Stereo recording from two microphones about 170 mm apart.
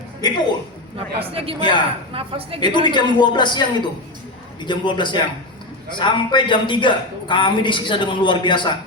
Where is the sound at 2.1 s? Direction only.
35° right (ahead or behind).